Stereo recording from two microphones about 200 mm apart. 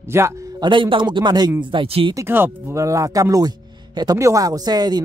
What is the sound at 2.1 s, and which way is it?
Speech, 10° right (ahead or behind).